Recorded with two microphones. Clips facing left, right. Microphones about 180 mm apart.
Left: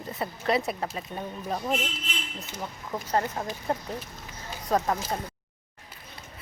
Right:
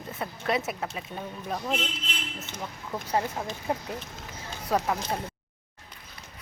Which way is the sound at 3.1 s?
10° right (ahead or behind).